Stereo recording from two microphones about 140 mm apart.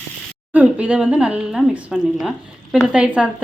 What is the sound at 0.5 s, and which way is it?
A woman's voice, 10° right (ahead or behind).